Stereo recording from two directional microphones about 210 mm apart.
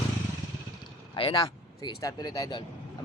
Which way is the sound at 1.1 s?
20° left (ahead or behind).